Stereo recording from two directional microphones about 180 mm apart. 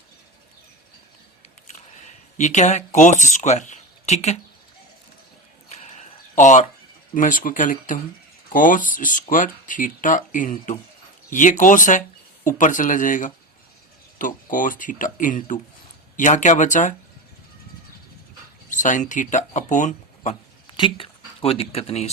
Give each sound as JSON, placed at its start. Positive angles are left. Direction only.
{"t": 2.0, "sound": "speech", "side_deg": 40}
{"t": 5.7, "sound": "a sound", "side_deg": 40}
{"t": 7.1, "sound": "speech", "side_deg": 45}
{"t": 18.7, "sound": "speech", "side_deg": 45}
{"t": 20.7, "sound": "speech", "side_deg": 25}